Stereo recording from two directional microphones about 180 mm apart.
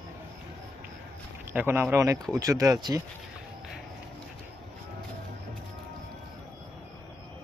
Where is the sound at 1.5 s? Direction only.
10° right (ahead or behind).